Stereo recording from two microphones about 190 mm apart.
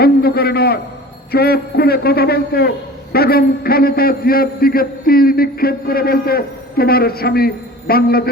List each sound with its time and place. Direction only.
0.0 s a man's voice: 55° left (ahead or behind)